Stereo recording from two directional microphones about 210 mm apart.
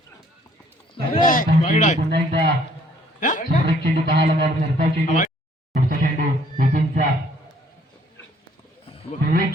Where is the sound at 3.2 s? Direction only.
40° left (ahead or behind).